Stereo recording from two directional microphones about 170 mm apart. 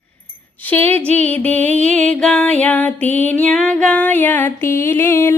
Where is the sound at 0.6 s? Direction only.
10° left (ahead or behind).